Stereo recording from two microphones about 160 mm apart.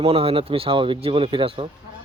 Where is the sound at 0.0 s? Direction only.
35° right (ahead or behind).